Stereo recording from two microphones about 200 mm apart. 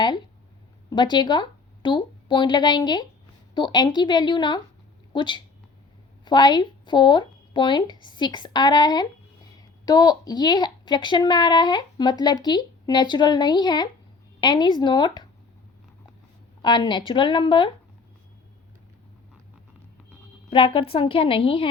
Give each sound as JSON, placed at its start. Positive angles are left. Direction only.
{"t": 0.9, "sound": "a woman's voice", "side_deg": 20}
{"t": 16.6, "sound": "speech", "side_deg": 20}
{"t": 20.5, "sound": "speech", "side_deg": 25}